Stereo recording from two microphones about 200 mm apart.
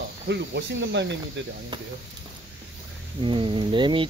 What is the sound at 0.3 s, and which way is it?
Speech, 60° right (ahead or behind).